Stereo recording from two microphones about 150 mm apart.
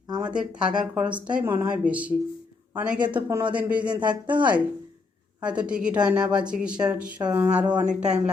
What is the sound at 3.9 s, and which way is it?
Speech, 30° right (ahead or behind).